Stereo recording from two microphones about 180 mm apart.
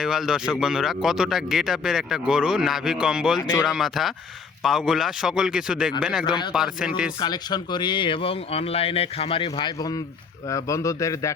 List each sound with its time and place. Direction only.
0.0 s speech: centre (ahead or behind)
6.2 s speech: 25° left (ahead or behind)
6.5 s speech: 5° right (ahead or behind)
7.2 s a man's voice: 25° left (ahead or behind)